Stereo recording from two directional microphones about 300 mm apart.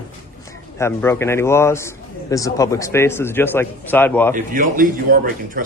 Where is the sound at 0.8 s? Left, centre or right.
Centre.